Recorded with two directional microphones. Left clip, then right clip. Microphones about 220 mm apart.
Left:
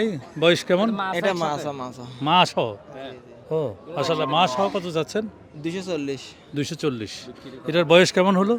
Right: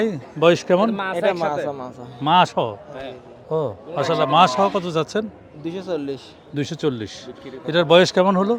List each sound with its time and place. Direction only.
0.0 s speech: 10° left (ahead or behind)
0.9 s a man's voice: 45° left (ahead or behind)
2.2 s speech: 15° left (ahead or behind)
2.9 s a man's voice: 5° right (ahead or behind)
3.5 s speech: 10° left (ahead or behind)
4.2 s speech: 5° right (ahead or behind)
5.6 s a man's voice: 40° left (ahead or behind)
6.5 s speech: 10° left (ahead or behind)